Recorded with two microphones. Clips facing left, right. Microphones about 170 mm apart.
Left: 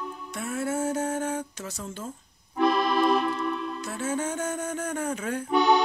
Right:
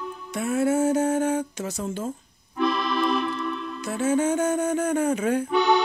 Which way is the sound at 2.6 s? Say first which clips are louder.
Left 2 dB; 40° left (ahead or behind).